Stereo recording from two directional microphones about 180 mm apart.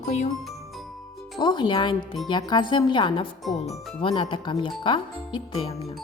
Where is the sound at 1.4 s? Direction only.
25° left (ahead or behind).